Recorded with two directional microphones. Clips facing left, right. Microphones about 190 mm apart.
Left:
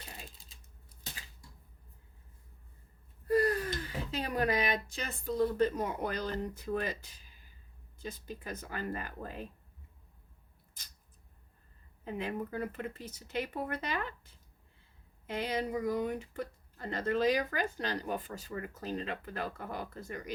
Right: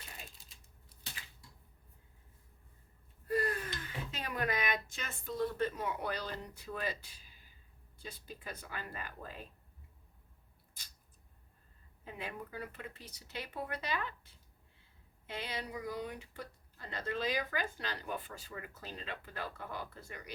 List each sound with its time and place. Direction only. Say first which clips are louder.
3.2 s gasp: left 6 dB; 40° left (ahead or behind)
3.8 s speech: left 6 dB; 35° left (ahead or behind)
12.0 s speech: left 8 dB; 45° left (ahead or behind)
15.3 s speech: left 8 dB; 45° left (ahead or behind)